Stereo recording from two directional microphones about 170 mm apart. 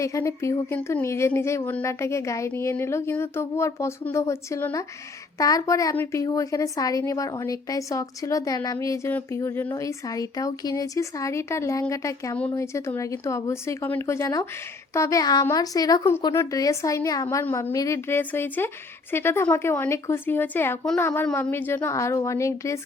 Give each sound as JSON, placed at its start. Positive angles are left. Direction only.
{"t": 0.0, "sound": "a woman's voice", "side_deg": 20}